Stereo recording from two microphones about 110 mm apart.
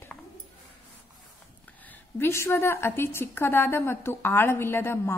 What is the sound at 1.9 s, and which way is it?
A woman's voice, 20° left (ahead or behind).